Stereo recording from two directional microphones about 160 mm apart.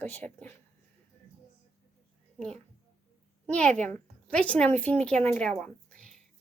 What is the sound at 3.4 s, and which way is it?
A woman's voice, 5° left (ahead or behind).